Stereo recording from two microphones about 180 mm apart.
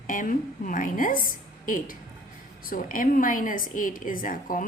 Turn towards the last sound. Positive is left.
turn(degrees=50)  # may be behind; listen again after turning